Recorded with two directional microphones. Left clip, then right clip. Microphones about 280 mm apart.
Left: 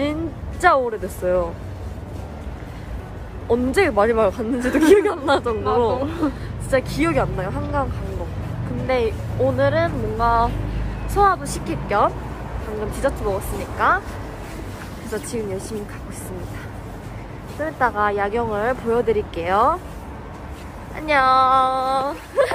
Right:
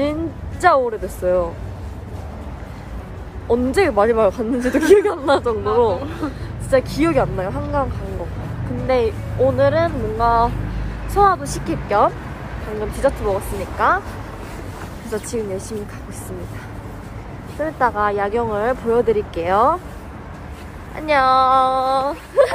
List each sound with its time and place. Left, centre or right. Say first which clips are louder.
0.0 s a sound: right 3 dB; centre
3.4 s speech: right 2 dB; centre
5.9 s speech: left 3 dB; left
6.7 s speech: right 3 dB; centre
15.0 s speech: right 3 dB; centre
17.6 s speech: right 2 dB; centre
20.9 s speech: right 1 dB; centre